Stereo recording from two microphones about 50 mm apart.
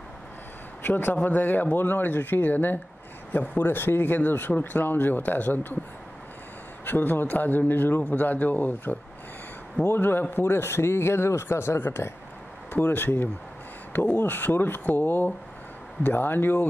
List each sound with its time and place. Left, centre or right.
0.8 s speech: left
6.9 s speech: left
12.7 s speech: left